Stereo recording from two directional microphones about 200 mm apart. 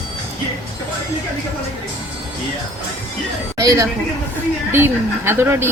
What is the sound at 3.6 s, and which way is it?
A woman's voice, 15° right (ahead or behind).